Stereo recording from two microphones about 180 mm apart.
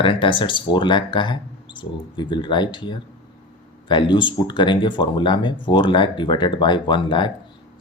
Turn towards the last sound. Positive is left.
turn(degrees=25)  # may be behind; listen again after turning